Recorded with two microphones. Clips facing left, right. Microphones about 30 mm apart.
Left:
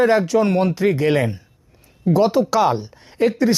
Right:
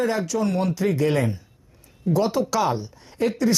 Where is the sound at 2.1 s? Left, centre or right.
Left.